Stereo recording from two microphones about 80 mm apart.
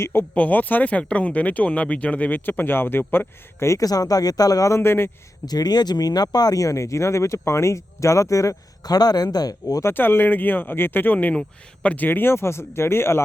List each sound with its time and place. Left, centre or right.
0.0 s speech: left
3.8 s speech: left
5.5 s speech: left
9.8 s speech: left